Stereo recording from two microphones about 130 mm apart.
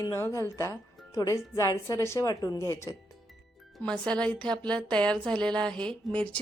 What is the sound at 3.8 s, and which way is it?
A woman's voice, 5° left (ahead or behind).